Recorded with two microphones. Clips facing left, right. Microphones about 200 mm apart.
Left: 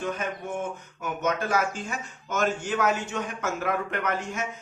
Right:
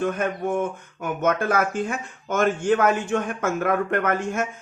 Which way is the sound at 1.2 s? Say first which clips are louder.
Right 4 dB; 55° right (ahead or behind).